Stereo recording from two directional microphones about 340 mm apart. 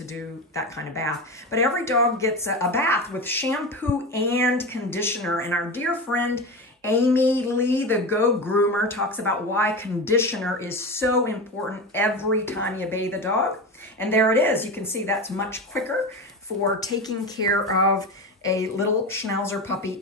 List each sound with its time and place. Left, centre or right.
0.6 s speech: centre
16.8 s speech: centre